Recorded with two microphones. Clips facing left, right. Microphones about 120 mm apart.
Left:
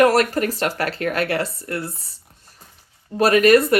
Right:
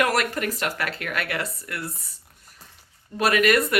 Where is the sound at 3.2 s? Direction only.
35° left (ahead or behind).